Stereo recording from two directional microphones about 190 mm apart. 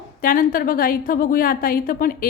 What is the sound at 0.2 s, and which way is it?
A woman's voice, 45° left (ahead or behind).